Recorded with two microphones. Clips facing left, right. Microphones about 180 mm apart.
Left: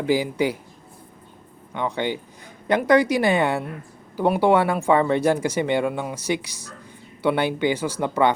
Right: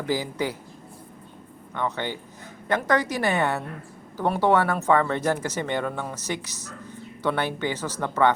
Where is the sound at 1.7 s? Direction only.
15° left (ahead or behind).